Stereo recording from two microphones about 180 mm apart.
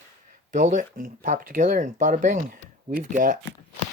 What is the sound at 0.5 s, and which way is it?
Speech, 45° right (ahead or behind).